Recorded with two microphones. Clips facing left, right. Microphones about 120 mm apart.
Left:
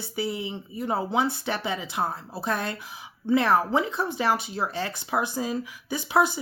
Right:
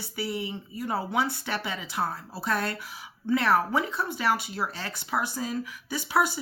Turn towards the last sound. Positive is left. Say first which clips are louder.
# left 3 dB
turn(degrees=20)  # may be behind; listen again after turning